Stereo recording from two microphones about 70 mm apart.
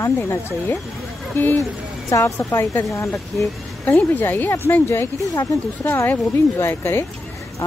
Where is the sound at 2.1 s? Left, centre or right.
Left.